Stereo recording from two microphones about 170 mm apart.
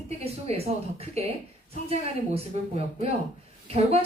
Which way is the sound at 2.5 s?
40° right (ahead or behind).